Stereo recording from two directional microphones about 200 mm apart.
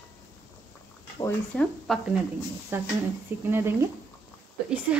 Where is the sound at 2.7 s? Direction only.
10° right (ahead or behind).